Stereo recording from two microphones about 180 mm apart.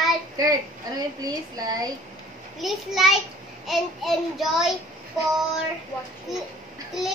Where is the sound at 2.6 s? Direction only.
Centre (ahead or behind).